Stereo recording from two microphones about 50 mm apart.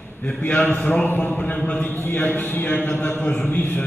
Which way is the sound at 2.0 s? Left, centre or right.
Left.